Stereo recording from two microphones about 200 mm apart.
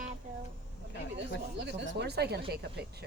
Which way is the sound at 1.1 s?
60° right (ahead or behind).